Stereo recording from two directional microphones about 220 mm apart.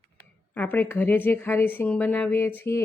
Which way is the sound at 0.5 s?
10° left (ahead or behind).